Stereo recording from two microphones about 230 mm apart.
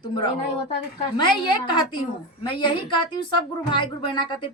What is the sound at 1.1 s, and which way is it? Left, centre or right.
A woman's voice, centre.